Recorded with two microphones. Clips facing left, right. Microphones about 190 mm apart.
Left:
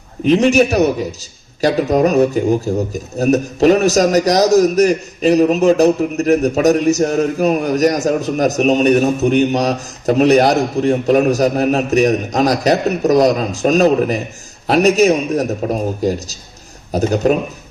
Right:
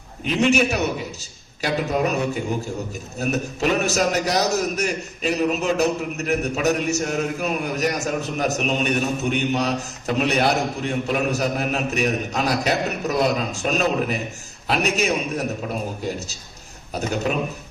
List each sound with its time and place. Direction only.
0.3 s a man's voice: 40° left (ahead or behind)